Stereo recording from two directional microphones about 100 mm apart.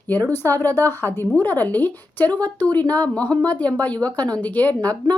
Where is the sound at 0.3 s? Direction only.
20° left (ahead or behind).